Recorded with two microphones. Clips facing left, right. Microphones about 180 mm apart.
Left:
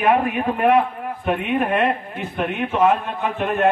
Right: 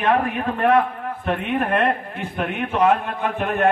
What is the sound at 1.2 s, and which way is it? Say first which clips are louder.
A man's voice: left 2 dB; 5° left (ahead or behind).